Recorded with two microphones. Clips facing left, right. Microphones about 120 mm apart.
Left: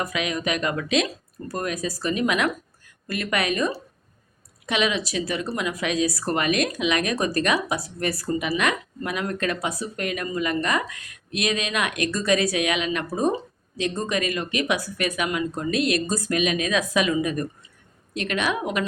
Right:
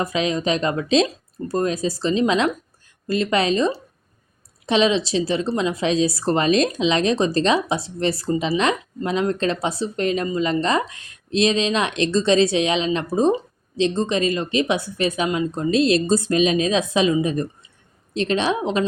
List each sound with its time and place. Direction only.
0.0 s speech: 30° right (ahead or behind)